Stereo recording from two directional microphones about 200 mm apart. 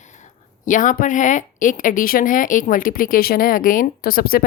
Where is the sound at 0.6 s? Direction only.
40° left (ahead or behind).